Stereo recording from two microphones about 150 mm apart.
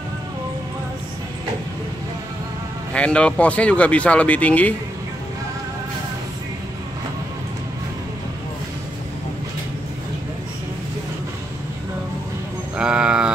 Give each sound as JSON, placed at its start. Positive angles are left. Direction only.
{"t": 2.9, "sound": "speech", "side_deg": 5}
{"t": 12.7, "sound": "sheep", "side_deg": -5}